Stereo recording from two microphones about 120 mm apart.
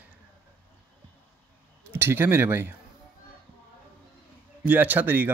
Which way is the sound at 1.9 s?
20° right (ahead or behind).